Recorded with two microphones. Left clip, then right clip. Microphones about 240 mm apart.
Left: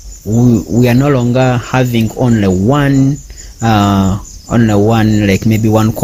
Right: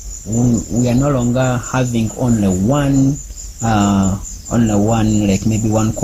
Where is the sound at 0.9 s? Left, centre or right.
Left.